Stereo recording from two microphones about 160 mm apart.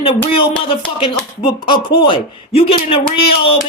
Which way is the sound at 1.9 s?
30° left (ahead or behind).